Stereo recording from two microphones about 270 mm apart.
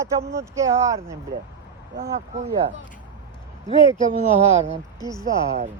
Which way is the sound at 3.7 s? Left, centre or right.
Right.